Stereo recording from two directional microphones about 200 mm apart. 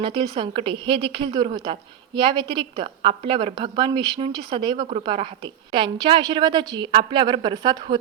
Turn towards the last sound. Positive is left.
turn(degrees=-20)  # may be behind; listen again after turning